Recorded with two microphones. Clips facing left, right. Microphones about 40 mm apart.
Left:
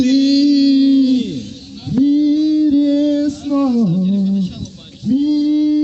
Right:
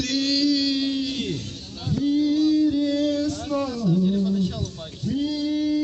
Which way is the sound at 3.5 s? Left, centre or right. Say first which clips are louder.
Left 13 dB; left.